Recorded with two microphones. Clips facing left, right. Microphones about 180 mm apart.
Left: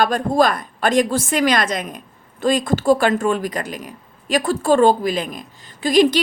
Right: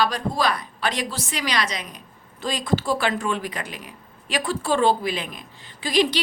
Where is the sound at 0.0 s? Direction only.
50° left (ahead or behind).